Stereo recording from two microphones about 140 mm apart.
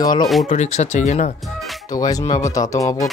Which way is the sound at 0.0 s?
30° left (ahead or behind).